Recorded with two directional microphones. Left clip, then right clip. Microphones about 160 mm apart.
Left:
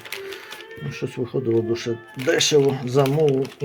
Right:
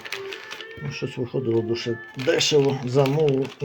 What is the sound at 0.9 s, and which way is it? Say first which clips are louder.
Speech: left 2 dB; 20° left (ahead or behind).